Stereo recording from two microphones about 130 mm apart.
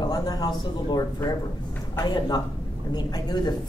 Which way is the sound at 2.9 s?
35° left (ahead or behind).